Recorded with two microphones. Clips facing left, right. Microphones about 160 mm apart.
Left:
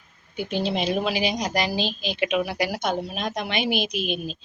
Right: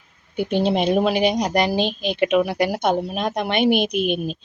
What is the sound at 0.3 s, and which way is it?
A woman's voice, 55° right (ahead or behind).